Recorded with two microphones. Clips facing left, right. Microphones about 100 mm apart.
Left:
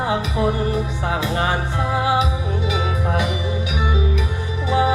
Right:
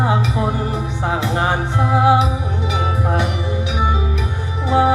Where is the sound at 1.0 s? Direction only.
20° right (ahead or behind).